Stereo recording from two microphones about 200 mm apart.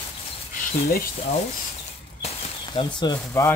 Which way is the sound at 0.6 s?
45° left (ahead or behind).